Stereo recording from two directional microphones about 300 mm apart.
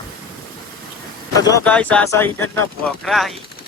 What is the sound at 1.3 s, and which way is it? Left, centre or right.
Speech, centre.